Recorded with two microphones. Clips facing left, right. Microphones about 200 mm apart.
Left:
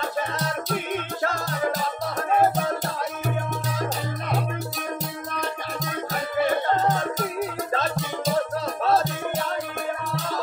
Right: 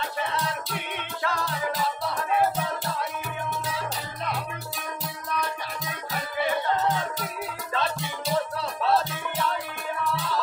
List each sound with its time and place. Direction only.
0.3 s music: 45° left (ahead or behind)
5.3 s music: 45° left (ahead or behind)